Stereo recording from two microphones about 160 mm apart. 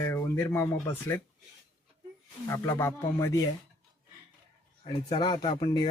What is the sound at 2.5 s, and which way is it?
Speech, 15° left (ahead or behind).